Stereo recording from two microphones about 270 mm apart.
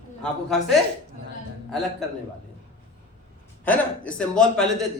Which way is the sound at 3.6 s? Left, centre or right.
Centre.